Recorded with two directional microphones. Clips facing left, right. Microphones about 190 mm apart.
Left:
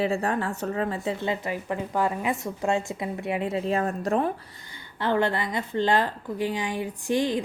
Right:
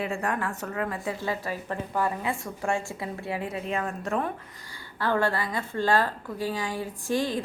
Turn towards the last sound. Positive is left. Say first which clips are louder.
# left 3 dB
turn(degrees=15)  # may be behind; listen again after turning